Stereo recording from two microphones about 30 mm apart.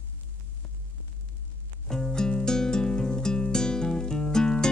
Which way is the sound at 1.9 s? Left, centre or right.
Left.